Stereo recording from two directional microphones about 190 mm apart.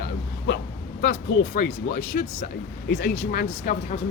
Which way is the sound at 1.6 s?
45° left (ahead or behind).